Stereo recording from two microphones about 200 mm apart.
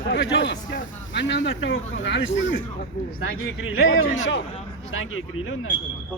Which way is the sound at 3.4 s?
85° left.